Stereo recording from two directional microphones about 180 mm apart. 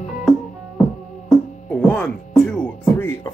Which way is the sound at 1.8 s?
5° left (ahead or behind).